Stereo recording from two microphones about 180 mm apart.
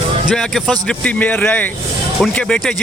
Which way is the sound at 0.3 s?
Centre (ahead or behind).